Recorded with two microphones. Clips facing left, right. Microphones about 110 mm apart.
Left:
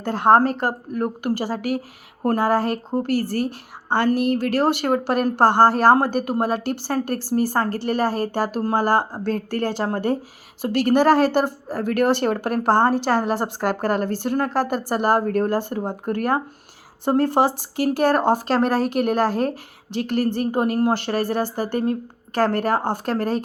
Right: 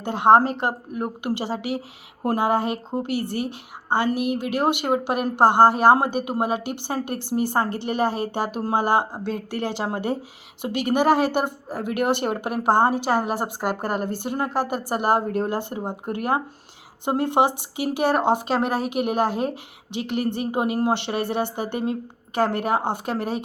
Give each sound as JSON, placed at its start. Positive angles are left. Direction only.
{"t": 0.0, "sound": "a woman's voice", "side_deg": -20}